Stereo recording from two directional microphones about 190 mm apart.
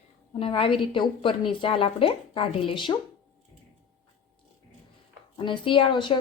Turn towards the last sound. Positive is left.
turn(degrees=25)  # may be behind; listen again after turning